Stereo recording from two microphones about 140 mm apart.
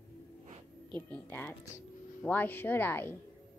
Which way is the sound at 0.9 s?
15° left (ahead or behind).